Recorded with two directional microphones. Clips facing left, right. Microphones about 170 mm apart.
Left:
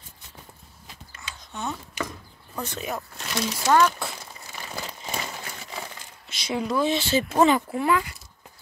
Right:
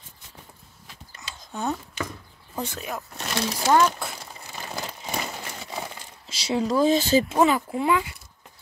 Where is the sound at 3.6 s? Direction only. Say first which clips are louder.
Even; 15° right (ahead or behind).